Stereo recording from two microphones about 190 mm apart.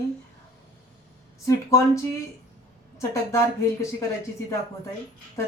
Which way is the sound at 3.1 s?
15° left (ahead or behind).